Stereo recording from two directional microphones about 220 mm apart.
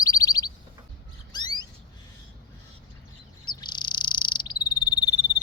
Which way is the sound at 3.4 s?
20° left (ahead or behind).